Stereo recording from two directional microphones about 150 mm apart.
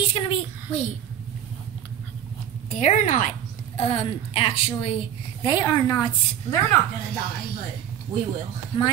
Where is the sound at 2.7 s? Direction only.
55° left (ahead or behind); by 4.9 s 40° left (ahead or behind).